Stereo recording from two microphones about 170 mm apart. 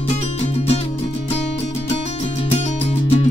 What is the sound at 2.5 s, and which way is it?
Music, 40° left (ahead or behind).